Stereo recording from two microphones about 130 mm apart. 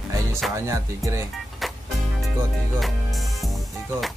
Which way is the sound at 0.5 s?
20° right (ahead or behind).